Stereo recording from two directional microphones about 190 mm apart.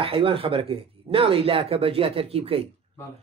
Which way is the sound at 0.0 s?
30° right (ahead or behind).